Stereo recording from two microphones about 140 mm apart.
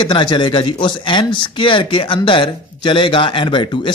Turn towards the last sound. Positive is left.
turn(degrees=35)  # may be behind; listen again after turning